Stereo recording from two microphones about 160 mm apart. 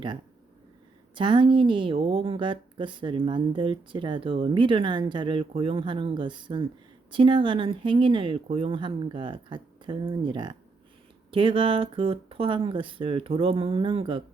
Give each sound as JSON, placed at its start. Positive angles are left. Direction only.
{"t": 1.1, "sound": "a woman's voice", "side_deg": -30}